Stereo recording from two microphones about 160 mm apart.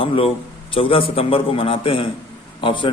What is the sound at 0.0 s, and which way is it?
Speech, 35° left (ahead or behind).